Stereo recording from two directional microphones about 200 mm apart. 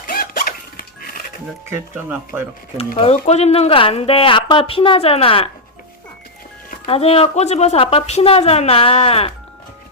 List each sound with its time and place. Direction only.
0.1 s zipper: 45° left (ahead or behind)
1.7 s speech: 10° right (ahead or behind)
3.2 s speech: 30° left (ahead or behind)
6.8 s speech: 30° left (ahead or behind)